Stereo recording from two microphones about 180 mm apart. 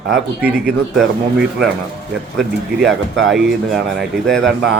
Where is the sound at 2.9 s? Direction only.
90° right.